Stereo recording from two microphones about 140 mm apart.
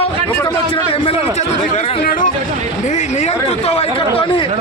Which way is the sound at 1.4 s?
75° left (ahead or behind).